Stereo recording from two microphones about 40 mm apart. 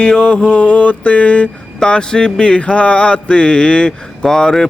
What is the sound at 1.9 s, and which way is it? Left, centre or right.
Mantra, left.